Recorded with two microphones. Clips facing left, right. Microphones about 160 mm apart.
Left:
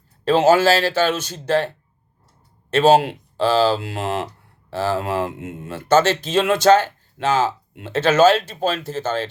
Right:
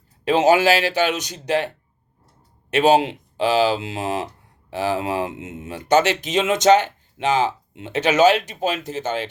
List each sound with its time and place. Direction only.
0.3 s speech: 15° right (ahead or behind)